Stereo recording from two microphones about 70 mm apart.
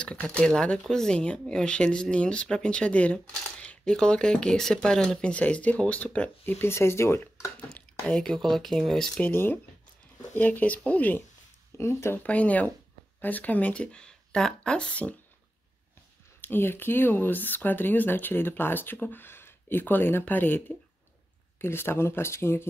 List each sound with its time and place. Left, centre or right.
0.0 s speech: centre
6.6 s speech: left
8.1 s speech: centre
9.2 s speech: left
11.8 s speech: left
12.2 s speech: left
16.3 s speech: left